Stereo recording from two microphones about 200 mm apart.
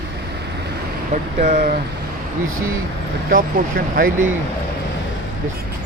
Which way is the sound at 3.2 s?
45° right (ahead or behind).